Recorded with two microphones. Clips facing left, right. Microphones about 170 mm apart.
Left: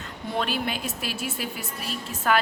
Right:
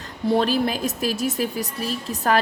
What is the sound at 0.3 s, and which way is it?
A woman's voice, 35° right (ahead or behind).